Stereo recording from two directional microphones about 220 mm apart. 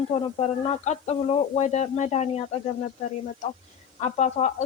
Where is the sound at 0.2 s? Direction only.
25° left (ahead or behind).